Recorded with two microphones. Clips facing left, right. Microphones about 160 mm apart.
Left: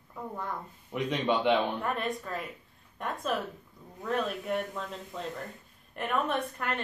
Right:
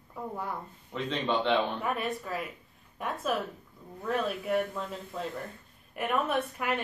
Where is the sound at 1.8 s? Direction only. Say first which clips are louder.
Even; 5° right (ahead or behind).